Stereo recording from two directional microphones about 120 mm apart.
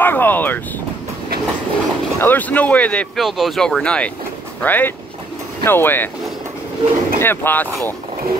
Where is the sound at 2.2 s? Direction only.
15° left (ahead or behind).